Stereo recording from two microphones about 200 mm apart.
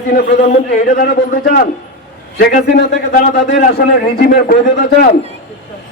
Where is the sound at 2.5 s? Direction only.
40° left (ahead or behind).